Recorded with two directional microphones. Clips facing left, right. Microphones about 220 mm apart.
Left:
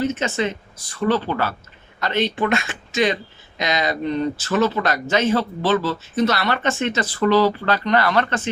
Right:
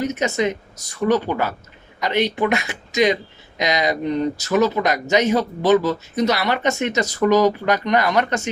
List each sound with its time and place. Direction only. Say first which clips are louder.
0.0 s speech: right 1 dB; 15° right (ahead or behind)